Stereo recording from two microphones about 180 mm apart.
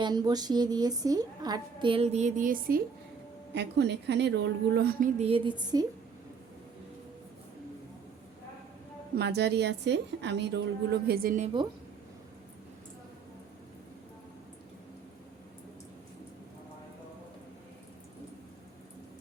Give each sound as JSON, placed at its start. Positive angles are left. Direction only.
{"t": 0.0, "sound": "a woman's voice", "side_deg": -25}
{"t": 3.5, "sound": "a woman's voice", "side_deg": -70}
{"t": 9.1, "sound": "a woman's voice", "side_deg": -65}
{"t": 11.4, "sound": "a woman's voice", "side_deg": -25}